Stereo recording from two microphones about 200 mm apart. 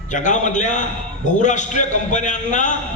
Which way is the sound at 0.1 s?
40° left (ahead or behind).